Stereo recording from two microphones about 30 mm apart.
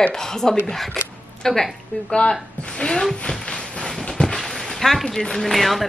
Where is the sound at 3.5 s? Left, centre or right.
Left.